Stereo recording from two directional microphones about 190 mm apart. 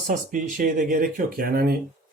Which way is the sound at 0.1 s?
45° right (ahead or behind).